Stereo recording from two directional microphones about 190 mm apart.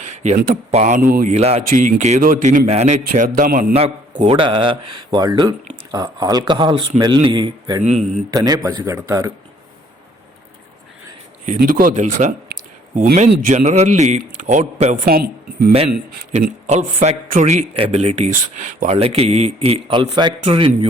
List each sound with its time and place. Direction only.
0.0 s a sound: 40° right (ahead or behind)
0.3 s a man's voice: 40° right (ahead or behind)
3.0 s a man's voice: 50° right (ahead or behind); by 9.3 s 15° right (ahead or behind)
11.4 s speech: 45° right (ahead or behind)
13.5 s a man's voice: 40° right (ahead or behind)
15.0 s speech: 50° right (ahead or behind)
16.3 s a man's voice: 35° right (ahead or behind)